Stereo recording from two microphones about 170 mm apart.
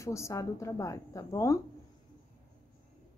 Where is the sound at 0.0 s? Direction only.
15° left (ahead or behind).